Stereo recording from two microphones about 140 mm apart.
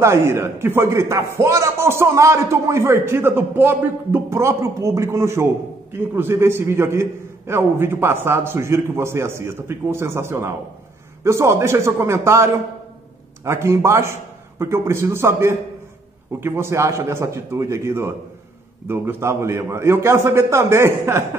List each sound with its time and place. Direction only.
0.0 s a man's voice: 20° right (ahead or behind)